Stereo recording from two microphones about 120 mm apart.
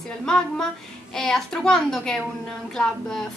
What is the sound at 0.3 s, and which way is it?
A woman's voice, 5° left (ahead or behind).